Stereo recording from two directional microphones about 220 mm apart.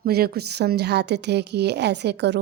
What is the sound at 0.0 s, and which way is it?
A woman's voice, 45° right (ahead or behind).